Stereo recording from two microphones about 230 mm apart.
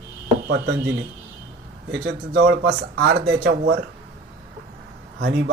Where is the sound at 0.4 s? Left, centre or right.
Right.